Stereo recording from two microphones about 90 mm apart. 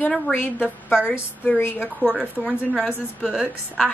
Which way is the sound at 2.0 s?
5° right (ahead or behind).